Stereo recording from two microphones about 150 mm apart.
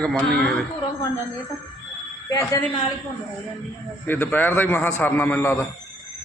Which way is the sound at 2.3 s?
20° left (ahead or behind).